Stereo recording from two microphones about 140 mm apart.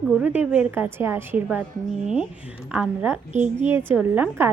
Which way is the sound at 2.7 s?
10° right (ahead or behind).